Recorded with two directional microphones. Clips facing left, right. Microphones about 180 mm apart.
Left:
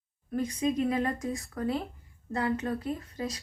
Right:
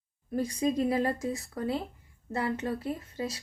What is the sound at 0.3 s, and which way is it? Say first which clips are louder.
A woman's voice: even; 35° right (ahead or behind).